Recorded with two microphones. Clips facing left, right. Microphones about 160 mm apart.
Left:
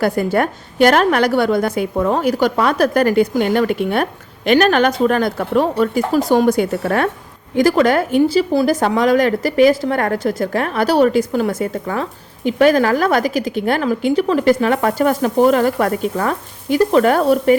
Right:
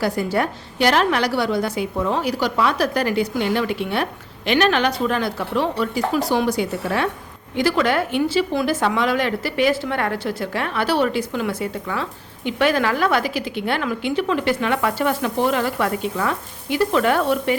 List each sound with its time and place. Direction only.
0.0 s a woman's voice: 55° left (ahead or behind)